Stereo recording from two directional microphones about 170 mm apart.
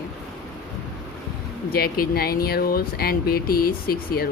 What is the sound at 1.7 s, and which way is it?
Speech, 60° left (ahead or behind).